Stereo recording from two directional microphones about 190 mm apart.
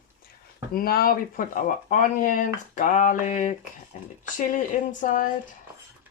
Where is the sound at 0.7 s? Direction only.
50° left (ahead or behind).